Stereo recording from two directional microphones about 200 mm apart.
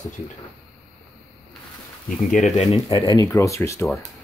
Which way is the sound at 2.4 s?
35° left (ahead or behind).